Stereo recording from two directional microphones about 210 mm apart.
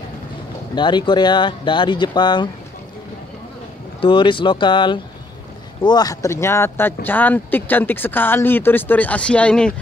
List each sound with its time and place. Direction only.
0.7 s speech: 20° left (ahead or behind)
4.0 s speech: 25° left (ahead or behind); by 9.8 s 5° left (ahead or behind)